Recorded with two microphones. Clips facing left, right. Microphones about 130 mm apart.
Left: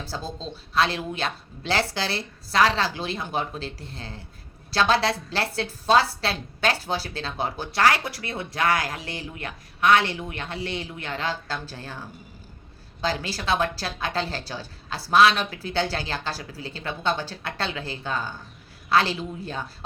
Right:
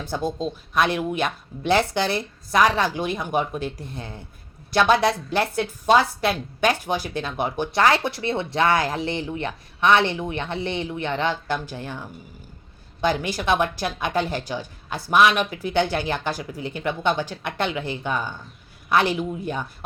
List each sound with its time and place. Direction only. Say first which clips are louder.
0.1 s speech: right 11 dB; 20° right (ahead or behind)
13.0 s speech: right 5 dB; 20° right (ahead or behind)